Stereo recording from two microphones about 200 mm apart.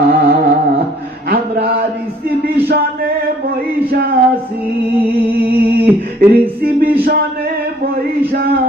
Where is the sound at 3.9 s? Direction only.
50° right (ahead or behind).